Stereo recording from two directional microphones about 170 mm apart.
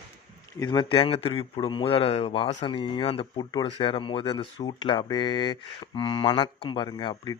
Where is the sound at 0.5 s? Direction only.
25° left (ahead or behind).